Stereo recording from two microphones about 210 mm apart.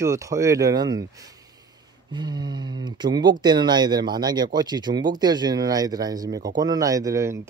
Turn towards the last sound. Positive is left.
turn(degrees=-15)  # may be behind; listen again after turning